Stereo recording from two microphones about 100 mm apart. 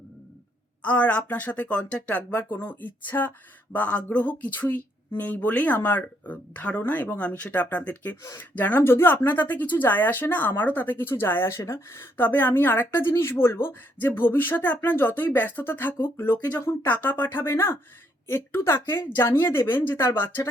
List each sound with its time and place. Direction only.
0.8 s speech: 15° left (ahead or behind)